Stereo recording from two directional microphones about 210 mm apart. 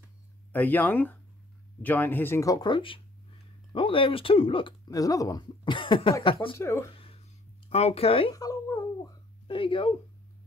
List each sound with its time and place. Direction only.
0.5 s speech: 10° left (ahead or behind); by 6.6 s 25° left (ahead or behind)
6.6 s speech: 15° left (ahead or behind)
6.9 s a sound: 25° left (ahead or behind)
7.7 s babbling: 30° left (ahead or behind)